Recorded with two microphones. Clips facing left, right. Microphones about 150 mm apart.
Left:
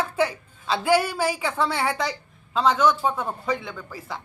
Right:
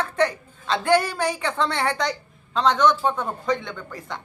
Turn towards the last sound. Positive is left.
turn(degrees=5)  # may be behind; listen again after turning